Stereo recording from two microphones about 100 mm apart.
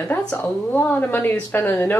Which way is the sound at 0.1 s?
15° left (ahead or behind).